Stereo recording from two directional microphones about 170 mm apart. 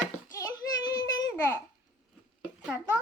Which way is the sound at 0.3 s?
20° left (ahead or behind).